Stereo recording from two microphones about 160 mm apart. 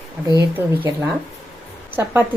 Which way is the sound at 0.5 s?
10° right (ahead or behind).